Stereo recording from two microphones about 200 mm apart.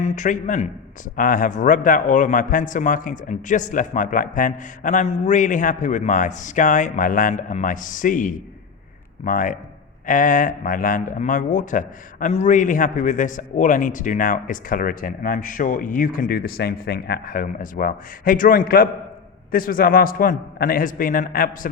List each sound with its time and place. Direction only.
0.0 s a man's voice: 35° left (ahead or behind)